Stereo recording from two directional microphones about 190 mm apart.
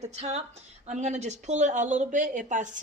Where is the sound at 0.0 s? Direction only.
35° right (ahead or behind).